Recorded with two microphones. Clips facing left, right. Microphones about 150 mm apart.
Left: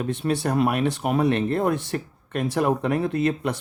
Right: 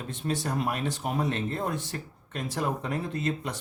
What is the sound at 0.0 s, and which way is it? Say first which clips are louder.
Speech: left 7 dB; 65° left (ahead or behind).